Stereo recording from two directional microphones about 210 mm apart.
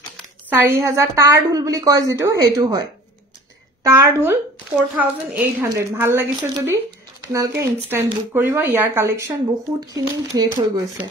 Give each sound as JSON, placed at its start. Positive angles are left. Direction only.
{"t": 0.5, "sound": "a woman's voice", "side_deg": -10}
{"t": 3.8, "sound": "a woman's voice", "side_deg": -10}